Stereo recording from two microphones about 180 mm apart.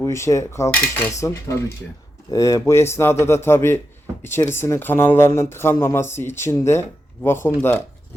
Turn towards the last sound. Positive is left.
turn(degrees=15)  # may be behind; listen again after turning